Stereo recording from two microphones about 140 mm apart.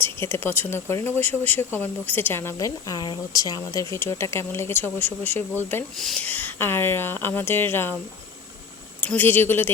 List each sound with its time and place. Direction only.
0.0 s speech: 15° left (ahead or behind)
9.0 s speech: 15° left (ahead or behind)